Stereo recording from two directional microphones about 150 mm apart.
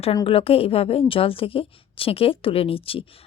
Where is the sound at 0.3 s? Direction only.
40° left (ahead or behind).